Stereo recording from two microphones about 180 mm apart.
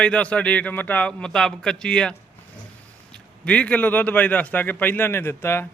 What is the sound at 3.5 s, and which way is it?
A man's voice, 10° left (ahead or behind).